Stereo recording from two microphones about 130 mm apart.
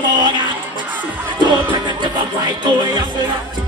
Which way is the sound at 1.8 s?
35° right (ahead or behind).